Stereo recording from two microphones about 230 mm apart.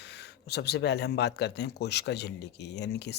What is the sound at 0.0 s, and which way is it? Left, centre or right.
Speech, left.